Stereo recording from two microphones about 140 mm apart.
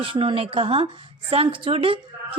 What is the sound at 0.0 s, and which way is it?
A woman's voice, 40° right (ahead or behind).